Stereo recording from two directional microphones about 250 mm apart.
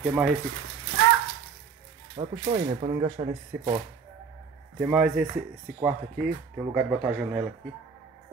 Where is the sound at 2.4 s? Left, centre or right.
Right.